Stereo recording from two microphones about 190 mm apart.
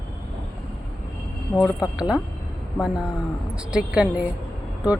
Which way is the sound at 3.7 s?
5° right (ahead or behind).